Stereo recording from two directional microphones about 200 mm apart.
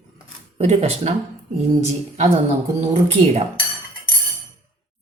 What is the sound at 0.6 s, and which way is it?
Speech, 30° right (ahead or behind).